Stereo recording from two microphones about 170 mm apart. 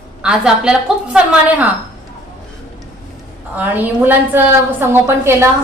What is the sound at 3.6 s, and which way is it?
A woman's voice, 10° right (ahead or behind).